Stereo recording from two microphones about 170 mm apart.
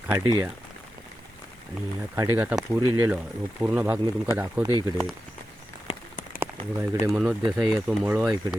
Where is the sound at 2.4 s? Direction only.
10° right (ahead or behind).